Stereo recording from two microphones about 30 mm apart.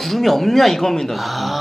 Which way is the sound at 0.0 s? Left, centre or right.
Centre.